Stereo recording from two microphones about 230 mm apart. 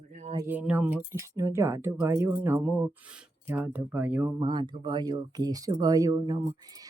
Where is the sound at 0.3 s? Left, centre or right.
Centre.